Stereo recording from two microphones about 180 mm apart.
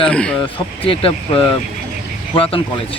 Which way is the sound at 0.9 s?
30° left (ahead or behind).